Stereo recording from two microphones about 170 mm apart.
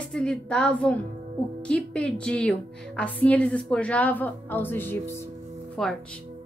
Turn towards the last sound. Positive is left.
turn(degrees=5)  # may be behind; listen again after turning